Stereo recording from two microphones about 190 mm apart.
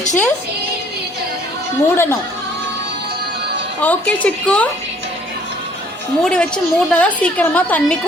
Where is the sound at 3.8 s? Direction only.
10° left (ahead or behind).